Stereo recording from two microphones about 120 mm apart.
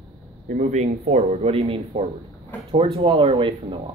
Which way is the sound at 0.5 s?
80° right.